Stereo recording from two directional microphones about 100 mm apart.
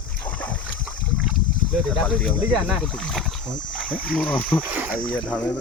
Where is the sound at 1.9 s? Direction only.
10° left (ahead or behind).